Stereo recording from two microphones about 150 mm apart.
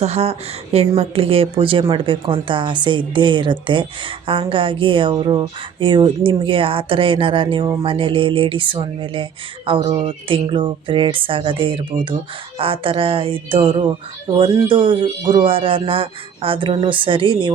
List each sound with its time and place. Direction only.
0.0 s a woman's voice: 40° right (ahead or behind)